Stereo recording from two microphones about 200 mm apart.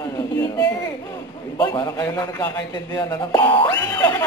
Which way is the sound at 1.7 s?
20° left (ahead or behind).